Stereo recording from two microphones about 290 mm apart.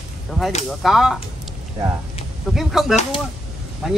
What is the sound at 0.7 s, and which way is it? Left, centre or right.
Speech, centre.